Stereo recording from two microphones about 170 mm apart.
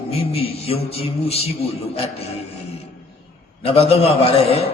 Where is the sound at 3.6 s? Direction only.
35° left (ahead or behind).